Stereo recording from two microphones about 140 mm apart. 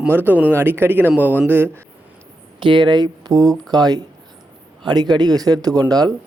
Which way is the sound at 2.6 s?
35° right (ahead or behind).